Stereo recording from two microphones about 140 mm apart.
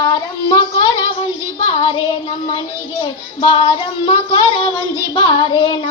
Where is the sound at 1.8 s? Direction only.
35° left (ahead or behind).